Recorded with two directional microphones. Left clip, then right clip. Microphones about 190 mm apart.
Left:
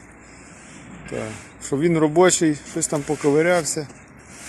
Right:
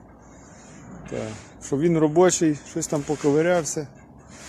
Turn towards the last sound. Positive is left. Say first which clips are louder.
# left 2 dB
turn(degrees=-5)  # may be behind; listen again after turning